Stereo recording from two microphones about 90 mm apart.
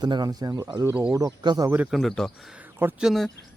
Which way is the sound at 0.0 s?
50° right (ahead or behind).